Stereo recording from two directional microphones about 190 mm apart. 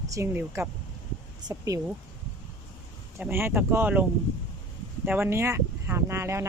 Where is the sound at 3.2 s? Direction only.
10° right (ahead or behind).